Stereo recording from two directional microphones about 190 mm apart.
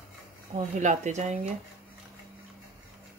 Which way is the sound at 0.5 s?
40° right (ahead or behind).